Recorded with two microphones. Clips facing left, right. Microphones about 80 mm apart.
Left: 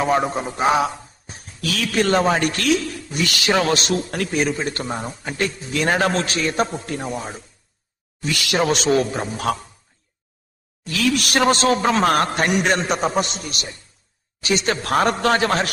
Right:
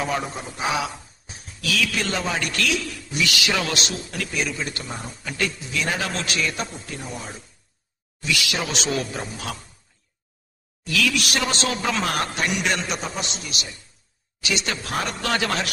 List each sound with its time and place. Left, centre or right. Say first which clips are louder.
0.0 s a man's voice: left 7 dB; left
5.2 s a man's voice: right 1 dB; left
6.7 s a man's voice: left 8 dB; left
10.8 s a man's voice: left 3 dB; left